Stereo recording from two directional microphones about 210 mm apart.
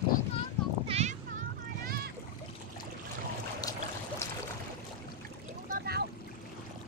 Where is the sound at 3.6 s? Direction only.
15° left (ahead or behind).